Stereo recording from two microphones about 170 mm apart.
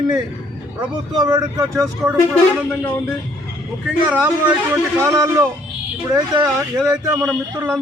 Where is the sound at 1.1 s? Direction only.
20° right (ahead or behind).